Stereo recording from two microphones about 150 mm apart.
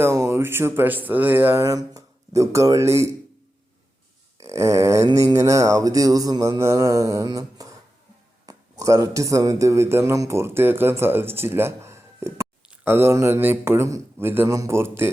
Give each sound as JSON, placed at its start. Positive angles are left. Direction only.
{"t": 0.0, "sound": "mantra", "side_deg": -15}
{"t": 4.4, "sound": "mantra", "side_deg": -20}
{"t": 8.4, "sound": "a man's voice", "side_deg": -25}